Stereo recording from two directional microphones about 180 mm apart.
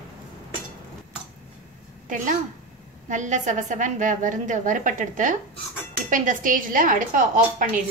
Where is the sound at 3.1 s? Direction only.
45° right (ahead or behind).